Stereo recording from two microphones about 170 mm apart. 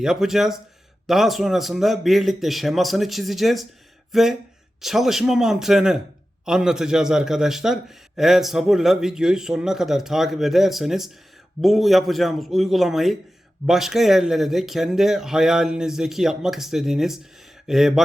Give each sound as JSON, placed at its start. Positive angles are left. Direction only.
{"t": 0.0, "sound": "a man's voice", "side_deg": -5}